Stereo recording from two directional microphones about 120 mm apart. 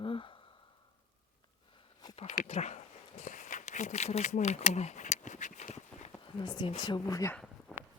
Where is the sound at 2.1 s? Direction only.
90° left.